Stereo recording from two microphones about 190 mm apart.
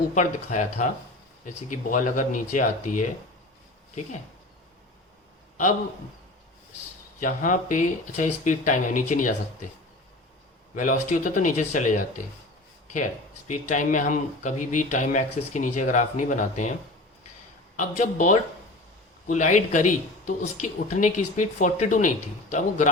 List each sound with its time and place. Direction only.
0.1 s speech: 40° left (ahead or behind)
7.2 s speech: 45° left (ahead or behind)
10.8 s speech: 45° left (ahead or behind)
13.7 s speech: 40° left (ahead or behind)
17.7 s speech: 45° left (ahead or behind)